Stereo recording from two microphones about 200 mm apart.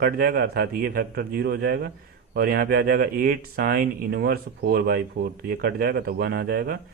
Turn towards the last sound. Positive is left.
turn(degrees=-50)  # may be behind; listen again after turning